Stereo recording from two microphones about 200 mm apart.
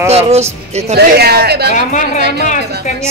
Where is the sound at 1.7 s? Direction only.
40° left (ahead or behind).